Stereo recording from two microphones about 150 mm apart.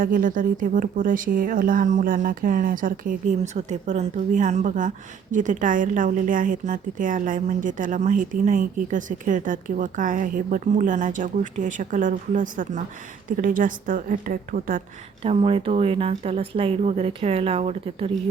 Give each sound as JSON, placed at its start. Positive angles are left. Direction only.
{"t": 0.0, "sound": "speech", "side_deg": -65}
{"t": 15.2, "sound": "speech", "side_deg": -40}